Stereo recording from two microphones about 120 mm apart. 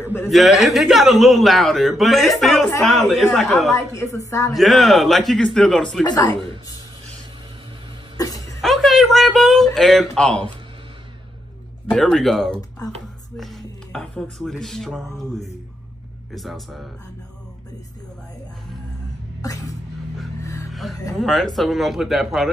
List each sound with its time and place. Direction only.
0.0 s speech: 20° left (ahead or behind)
0.3 s speech: centre (ahead or behind)
3.7 s a woman's voice: 25° left (ahead or behind)
4.6 s speech: centre (ahead or behind)
6.0 s speech: 30° left (ahead or behind)
8.2 s a sound: 30° left (ahead or behind)
8.5 s a sound: centre (ahead or behind)
9.8 s speech: centre (ahead or behind)
11.9 s speech: 5° left (ahead or behind)
12.8 s speech: 30° left (ahead or behind)
13.4 s speech: centre (ahead or behind)
16.3 s speech: centre (ahead or behind)
19.4 s a woman's voice: 30° left (ahead or behind)
20.7 s speech: centre (ahead or behind)